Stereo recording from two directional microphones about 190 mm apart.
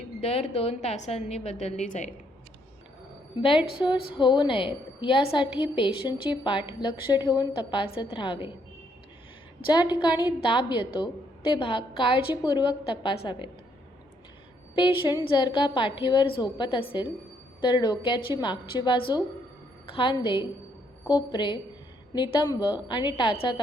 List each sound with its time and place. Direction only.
0.2 s a woman's voice: 35° left (ahead or behind)
3.8 s a woman's voice: 25° left (ahead or behind)
9.9 s a woman's voice: 20° left (ahead or behind)
14.8 s a woman's voice: 25° left (ahead or behind)